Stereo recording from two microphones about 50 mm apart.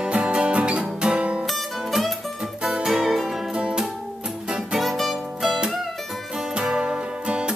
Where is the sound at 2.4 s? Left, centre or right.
Centre.